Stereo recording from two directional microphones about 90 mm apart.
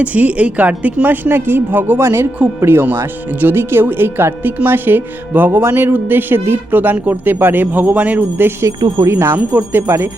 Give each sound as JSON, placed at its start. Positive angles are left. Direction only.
{"t": 0.0, "sound": "speech", "side_deg": -15}